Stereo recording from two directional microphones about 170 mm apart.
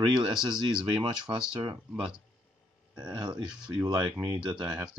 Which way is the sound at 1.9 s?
5° right (ahead or behind).